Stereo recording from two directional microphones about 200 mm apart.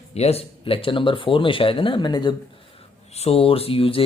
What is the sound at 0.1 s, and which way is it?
A man's voice, 30° left (ahead or behind).